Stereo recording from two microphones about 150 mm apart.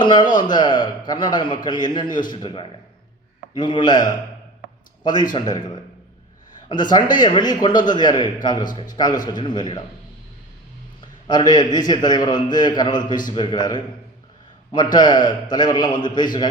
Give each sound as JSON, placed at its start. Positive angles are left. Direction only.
{"t": 0.0, "sound": "a man's voice", "side_deg": 30}
{"t": 5.3, "sound": "a man's voice", "side_deg": 30}
{"t": 6.9, "sound": "a man's voice", "side_deg": 30}
{"t": 11.3, "sound": "a man's voice", "side_deg": 30}
{"t": 14.9, "sound": "a man's voice", "side_deg": 30}